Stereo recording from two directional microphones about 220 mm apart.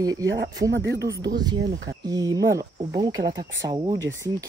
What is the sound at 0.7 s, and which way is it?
Speech, 50° right (ahead or behind).